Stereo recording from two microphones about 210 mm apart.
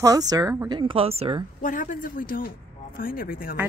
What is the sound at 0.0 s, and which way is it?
A woman's voice, 15° right (ahead or behind).